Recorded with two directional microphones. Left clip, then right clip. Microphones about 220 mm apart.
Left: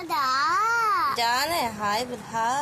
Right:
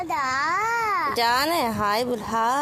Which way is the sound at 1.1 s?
45° right (ahead or behind).